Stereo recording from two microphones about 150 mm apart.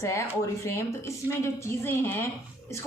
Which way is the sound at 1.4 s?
15° left (ahead or behind).